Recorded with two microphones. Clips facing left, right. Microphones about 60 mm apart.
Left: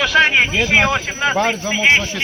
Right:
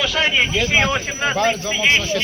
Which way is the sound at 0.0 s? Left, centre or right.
Left.